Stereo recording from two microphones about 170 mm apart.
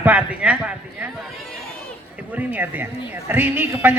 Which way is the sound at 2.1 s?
10° right (ahead or behind).